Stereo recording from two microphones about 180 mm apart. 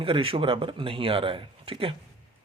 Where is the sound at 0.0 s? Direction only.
30° right (ahead or behind).